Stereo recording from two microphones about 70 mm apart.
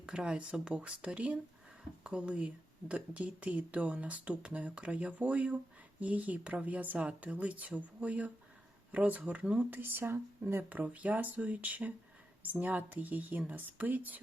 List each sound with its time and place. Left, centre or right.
0.0 s speech: centre